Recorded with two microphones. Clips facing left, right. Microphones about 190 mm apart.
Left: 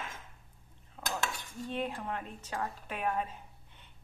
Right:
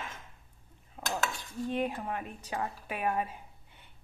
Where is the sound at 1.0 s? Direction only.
10° right (ahead or behind).